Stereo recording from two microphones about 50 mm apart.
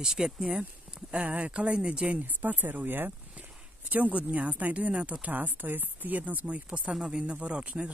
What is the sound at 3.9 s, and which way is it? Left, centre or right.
Speech, right.